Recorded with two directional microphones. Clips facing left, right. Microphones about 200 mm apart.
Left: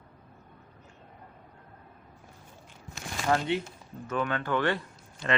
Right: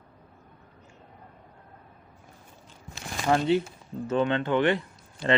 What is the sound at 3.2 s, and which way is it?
Speech, 15° right (ahead or behind).